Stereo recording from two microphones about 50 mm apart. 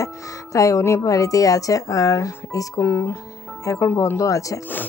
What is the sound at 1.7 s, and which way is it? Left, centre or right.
Speech, left.